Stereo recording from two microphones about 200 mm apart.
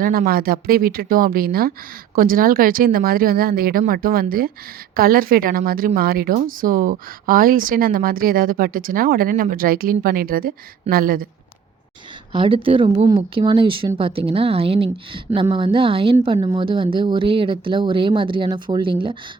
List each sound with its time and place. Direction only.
0.0 s speech: 45° right (ahead or behind)
12.3 s speech: 25° right (ahead or behind)